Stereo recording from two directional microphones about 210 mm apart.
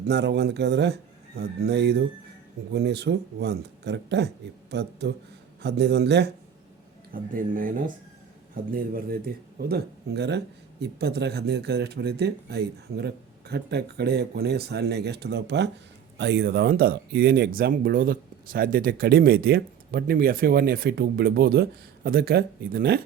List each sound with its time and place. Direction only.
0.1 s a man's voice: 55° right (ahead or behind)
7.1 s a man's voice: 40° right (ahead or behind)